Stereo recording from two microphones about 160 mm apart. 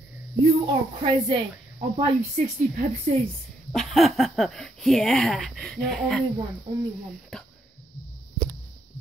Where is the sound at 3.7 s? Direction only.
Centre (ahead or behind).